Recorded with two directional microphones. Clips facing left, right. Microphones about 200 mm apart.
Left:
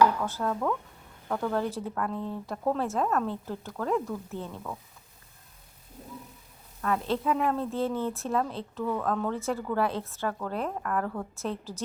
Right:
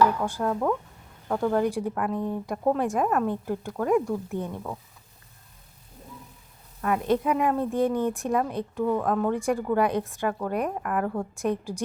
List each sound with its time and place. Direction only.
0.3 s a woman's voice: 15° right (ahead or behind)
6.8 s a woman's voice: 15° right (ahead or behind)
8.8 s speech: 25° right (ahead or behind)
9.0 s a woman's voice: 15° right (ahead or behind)